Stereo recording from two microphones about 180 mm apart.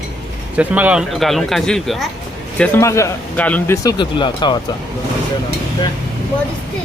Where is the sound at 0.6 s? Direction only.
10° right (ahead or behind); by 4.6 s 25° left (ahead or behind).